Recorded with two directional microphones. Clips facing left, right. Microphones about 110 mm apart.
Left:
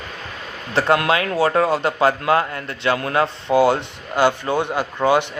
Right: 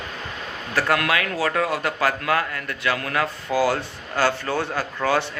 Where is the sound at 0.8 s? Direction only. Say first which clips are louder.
Left 4 dB; 25° left (ahead or behind).